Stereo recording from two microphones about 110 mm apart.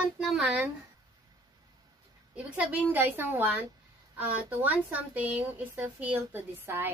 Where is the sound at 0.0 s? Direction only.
5° right (ahead or behind).